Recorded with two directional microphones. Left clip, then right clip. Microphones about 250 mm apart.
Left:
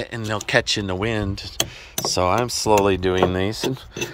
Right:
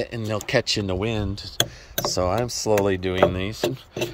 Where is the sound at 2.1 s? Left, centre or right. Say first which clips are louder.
Left 5 dB; centre.